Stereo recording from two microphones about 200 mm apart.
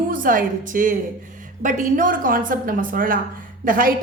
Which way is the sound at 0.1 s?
45° right (ahead or behind).